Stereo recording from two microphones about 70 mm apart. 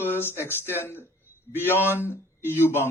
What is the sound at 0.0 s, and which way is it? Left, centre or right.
A man's voice, left.